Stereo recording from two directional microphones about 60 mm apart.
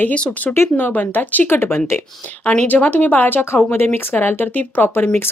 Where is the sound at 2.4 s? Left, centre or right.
Left.